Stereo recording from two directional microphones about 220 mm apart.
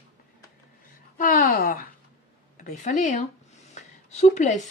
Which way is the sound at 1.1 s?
40° left (ahead or behind).